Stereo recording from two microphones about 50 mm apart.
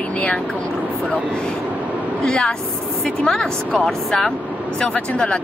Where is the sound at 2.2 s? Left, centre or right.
Centre.